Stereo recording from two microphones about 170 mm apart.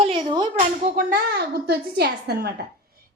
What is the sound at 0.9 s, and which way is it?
A woman's voice, 60° right (ahead or behind).